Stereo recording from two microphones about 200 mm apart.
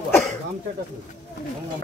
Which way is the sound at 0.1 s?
10° left (ahead or behind).